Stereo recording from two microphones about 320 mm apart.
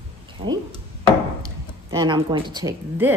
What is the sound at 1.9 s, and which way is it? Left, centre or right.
Speech, centre.